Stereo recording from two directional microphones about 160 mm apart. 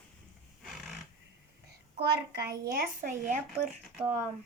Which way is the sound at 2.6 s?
65° right (ahead or behind).